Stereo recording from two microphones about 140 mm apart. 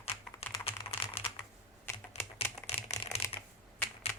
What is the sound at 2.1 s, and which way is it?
Typing, 50° left (ahead or behind).